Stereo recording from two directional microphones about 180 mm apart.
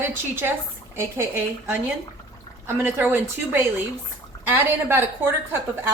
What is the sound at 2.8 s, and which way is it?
A woman's voice, 10° right (ahead or behind).